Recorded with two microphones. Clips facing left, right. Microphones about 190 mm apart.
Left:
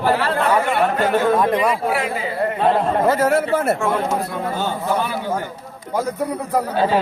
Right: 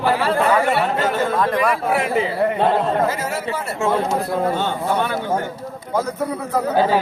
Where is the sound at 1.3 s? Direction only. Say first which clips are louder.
Left 1 dB; 20° left (ahead or behind).